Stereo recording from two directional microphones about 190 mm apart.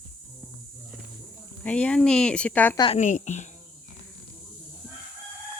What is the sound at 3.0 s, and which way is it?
Speech, 40° left (ahead or behind).